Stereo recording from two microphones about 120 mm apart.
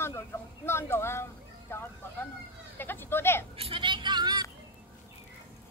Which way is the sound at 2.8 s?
20° left (ahead or behind).